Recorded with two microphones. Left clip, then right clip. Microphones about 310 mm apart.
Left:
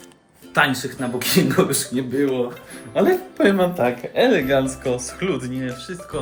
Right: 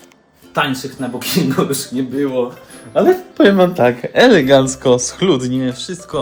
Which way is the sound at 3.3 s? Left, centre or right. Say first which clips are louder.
Right 7 dB; right.